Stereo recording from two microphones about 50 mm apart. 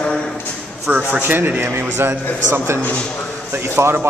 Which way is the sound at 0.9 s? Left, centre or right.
Right.